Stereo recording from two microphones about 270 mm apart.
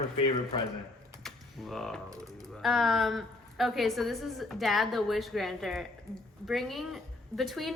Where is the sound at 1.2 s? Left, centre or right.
Centre.